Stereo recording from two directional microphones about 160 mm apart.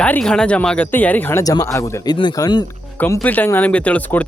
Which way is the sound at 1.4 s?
20° left (ahead or behind).